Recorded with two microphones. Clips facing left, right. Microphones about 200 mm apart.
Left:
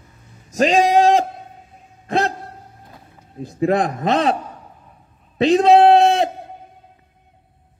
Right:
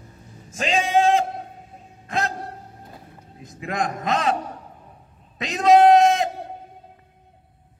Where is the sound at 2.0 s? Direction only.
35° left (ahead or behind).